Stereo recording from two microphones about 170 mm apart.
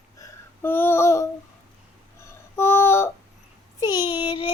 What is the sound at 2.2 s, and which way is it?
Music, 15° left (ahead or behind).